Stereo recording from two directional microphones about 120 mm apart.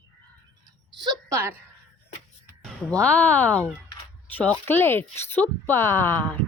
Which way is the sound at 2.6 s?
10° left (ahead or behind).